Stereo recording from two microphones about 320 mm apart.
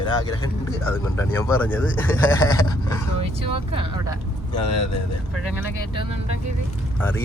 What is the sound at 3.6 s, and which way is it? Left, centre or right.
Speech, centre.